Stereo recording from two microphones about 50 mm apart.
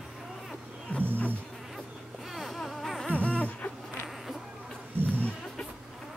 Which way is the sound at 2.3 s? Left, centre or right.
Centre.